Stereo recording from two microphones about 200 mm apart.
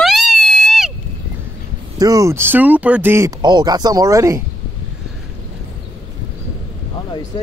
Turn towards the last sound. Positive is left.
turn(degrees=20)  # may be behind; listen again after turning